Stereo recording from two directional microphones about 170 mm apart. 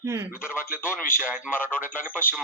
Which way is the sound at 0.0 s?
15° right (ahead or behind).